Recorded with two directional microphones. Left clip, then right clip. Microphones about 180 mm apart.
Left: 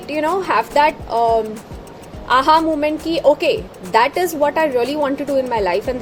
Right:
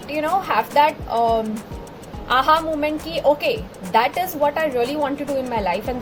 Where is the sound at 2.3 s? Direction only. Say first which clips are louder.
Left 4 dB; 55° left (ahead or behind).